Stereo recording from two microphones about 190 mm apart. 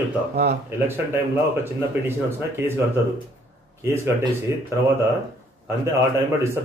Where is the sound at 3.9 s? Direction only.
15° right (ahead or behind).